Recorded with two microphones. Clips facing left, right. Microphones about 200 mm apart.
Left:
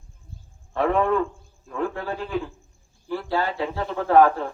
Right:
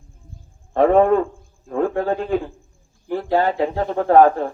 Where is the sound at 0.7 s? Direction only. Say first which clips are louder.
Right 7 dB; 45° right (ahead or behind).